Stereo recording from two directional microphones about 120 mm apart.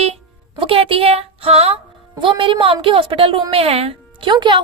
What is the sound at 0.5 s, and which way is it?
A woman's voice, 50° right (ahead or behind).